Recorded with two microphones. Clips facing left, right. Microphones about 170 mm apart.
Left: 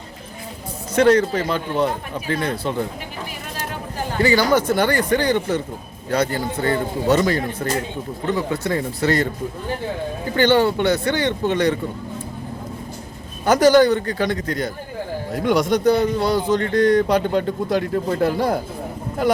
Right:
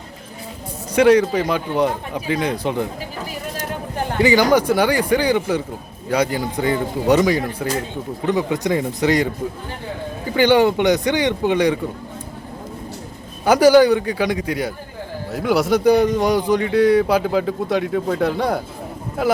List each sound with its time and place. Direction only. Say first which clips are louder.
0.9 s a man's voice: right 2 dB; 10° right (ahead or behind)
4.2 s a man's voice: right 2 dB; 15° right (ahead or behind)
10.3 s a man's voice: right 2 dB; 15° right (ahead or behind)
13.4 s a man's voice: right 2 dB; 10° right (ahead or behind)